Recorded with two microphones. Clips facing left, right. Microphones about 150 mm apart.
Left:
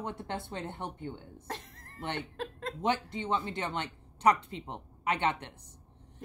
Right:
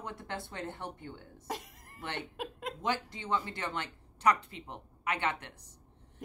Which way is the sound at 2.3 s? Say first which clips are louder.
Left 1 dB; 15° right (ahead or behind).